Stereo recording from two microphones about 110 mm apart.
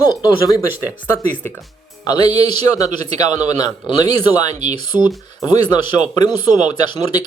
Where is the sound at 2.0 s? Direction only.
40° left (ahead or behind).